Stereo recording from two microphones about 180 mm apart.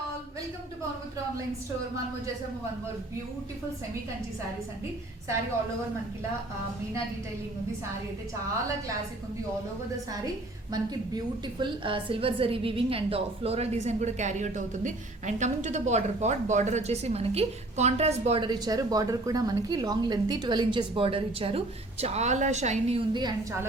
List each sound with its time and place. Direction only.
11.6 s a woman's voice: 30° right (ahead or behind)
18.4 s a woman's voice: 25° right (ahead or behind)